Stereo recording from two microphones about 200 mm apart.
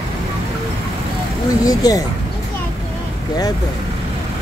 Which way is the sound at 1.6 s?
20° left (ahead or behind).